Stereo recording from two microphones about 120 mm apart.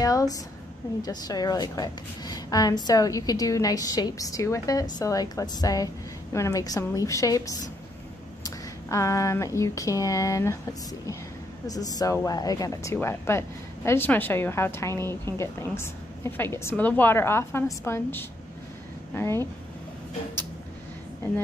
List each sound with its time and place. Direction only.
0.0 s a woman's voice: 30° left (ahead or behind)
11.6 s speech: 30° left (ahead or behind)